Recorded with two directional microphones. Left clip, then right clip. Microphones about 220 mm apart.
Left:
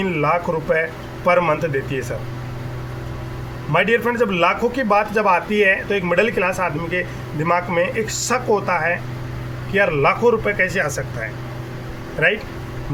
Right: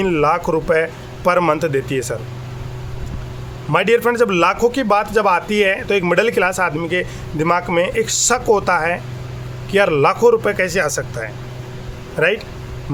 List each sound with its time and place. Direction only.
0.0 s speech: 50° right (ahead or behind)
3.7 s speech: 50° right (ahead or behind)
12.2 s speech: 45° right (ahead or behind)